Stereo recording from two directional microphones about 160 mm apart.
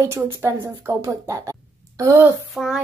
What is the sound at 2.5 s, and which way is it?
Speech, centre (ahead or behind).